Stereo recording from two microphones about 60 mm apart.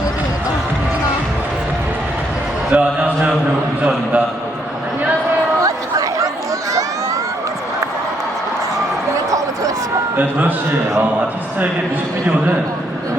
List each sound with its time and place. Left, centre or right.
2.7 s a man's voice: right
5.6 s chatter: right
10.2 s a man's voice: right